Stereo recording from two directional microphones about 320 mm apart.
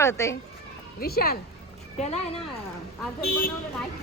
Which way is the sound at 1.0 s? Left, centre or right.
Left.